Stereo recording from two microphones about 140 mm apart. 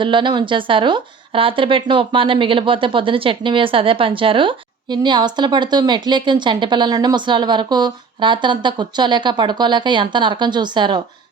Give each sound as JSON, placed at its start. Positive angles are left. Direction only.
{"t": 0.0, "sound": "a woman's voice", "side_deg": -35}